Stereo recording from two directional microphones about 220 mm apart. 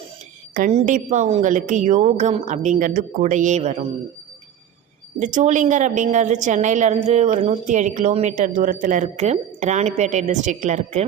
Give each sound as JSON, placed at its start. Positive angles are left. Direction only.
{"t": 0.5, "sound": "a woman's voice", "side_deg": -35}
{"t": 5.2, "sound": "a woman's voice", "side_deg": -35}